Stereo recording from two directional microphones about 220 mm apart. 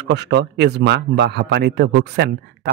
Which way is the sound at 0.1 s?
50° right (ahead or behind).